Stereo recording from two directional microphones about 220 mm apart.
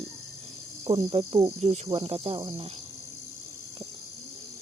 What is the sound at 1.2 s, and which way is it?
Speech, 30° right (ahead or behind).